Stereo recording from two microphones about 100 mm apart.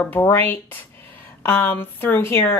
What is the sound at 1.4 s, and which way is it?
Speech, 25° left (ahead or behind).